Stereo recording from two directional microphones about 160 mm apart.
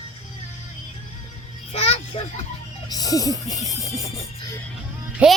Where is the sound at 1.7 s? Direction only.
40° left (ahead or behind).